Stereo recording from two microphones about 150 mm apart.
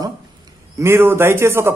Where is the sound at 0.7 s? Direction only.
15° right (ahead or behind).